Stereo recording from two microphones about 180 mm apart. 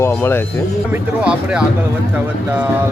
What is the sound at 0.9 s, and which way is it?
Speech, 5° right (ahead or behind).